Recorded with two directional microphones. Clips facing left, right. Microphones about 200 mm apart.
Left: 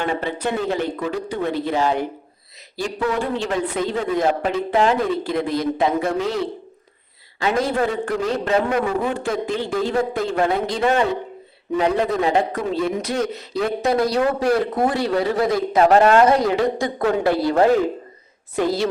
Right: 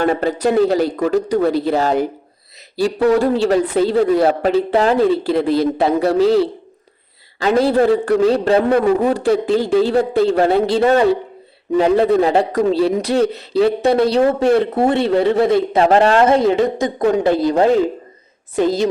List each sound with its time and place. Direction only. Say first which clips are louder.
0.0 s a man's voice: right 7 dB; 40° right (ahead or behind); by 18.9 s 20° right (ahead or behind)